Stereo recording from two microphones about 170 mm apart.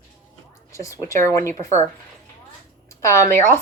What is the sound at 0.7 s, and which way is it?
Speech, 15° left (ahead or behind).